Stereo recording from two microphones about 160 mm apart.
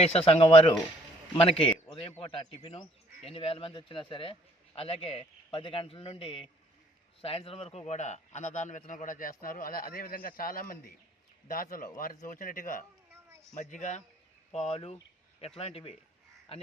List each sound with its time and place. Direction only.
0.0 s a man's voice: 40° left (ahead or behind); by 12.8 s 55° left (ahead or behind)
13.1 s a sound: 15° right (ahead or behind)
13.6 s a man's voice: 50° left (ahead or behind)